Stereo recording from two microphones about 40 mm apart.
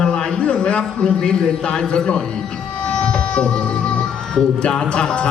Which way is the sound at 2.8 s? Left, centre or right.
Left.